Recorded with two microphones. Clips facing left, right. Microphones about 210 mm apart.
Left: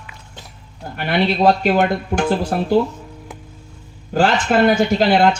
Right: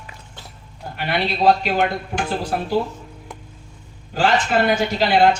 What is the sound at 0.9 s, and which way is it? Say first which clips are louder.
Speech: left 5 dB; 50° left (ahead or behind).